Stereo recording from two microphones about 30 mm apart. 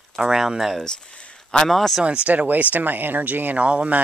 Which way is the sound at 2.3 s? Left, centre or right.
Right.